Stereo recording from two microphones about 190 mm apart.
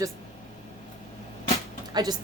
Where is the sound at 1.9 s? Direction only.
20° right (ahead or behind).